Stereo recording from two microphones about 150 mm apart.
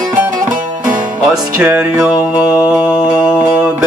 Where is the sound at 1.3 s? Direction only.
5° right (ahead or behind).